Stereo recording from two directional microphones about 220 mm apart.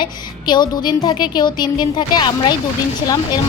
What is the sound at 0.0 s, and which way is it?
A woman's voice, 20° left (ahead or behind).